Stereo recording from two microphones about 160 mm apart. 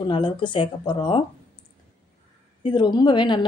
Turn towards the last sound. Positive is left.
turn(degrees=30)  # may be behind; listen again after turning